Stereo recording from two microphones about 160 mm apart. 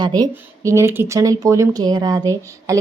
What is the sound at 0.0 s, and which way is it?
Speech, 25° right (ahead or behind).